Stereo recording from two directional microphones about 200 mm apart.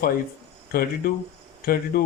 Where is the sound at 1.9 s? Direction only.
50° left (ahead or behind).